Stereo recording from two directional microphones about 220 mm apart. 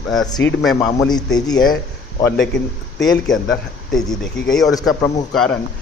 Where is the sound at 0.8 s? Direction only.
20° left (ahead or behind).